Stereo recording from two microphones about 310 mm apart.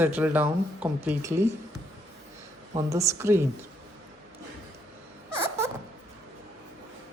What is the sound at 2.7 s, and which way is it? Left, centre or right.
Speech, centre.